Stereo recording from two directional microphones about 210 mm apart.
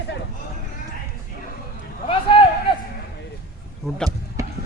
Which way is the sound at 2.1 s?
25° left (ahead or behind).